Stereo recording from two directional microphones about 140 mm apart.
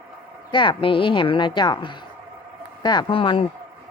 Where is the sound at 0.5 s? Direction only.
35° left (ahead or behind).